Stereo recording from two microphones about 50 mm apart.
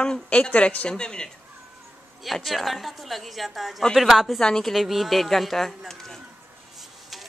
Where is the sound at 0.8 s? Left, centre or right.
Centre.